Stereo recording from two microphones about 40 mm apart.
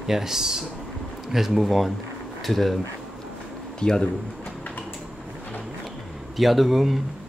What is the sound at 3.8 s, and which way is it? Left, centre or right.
Speech, centre.